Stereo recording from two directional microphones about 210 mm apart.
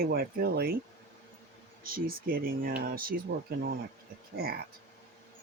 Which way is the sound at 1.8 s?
45° right (ahead or behind).